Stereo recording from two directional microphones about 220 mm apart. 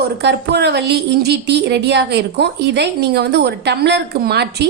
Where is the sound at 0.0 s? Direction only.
50° right (ahead or behind).